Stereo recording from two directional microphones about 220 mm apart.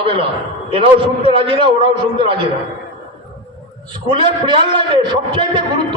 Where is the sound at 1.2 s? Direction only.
25° right (ahead or behind).